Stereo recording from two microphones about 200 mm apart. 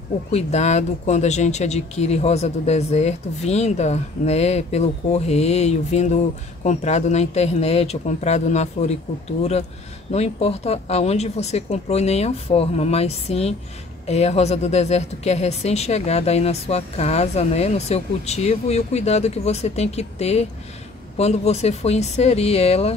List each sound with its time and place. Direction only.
0.3 s speech: 35° left (ahead or behind)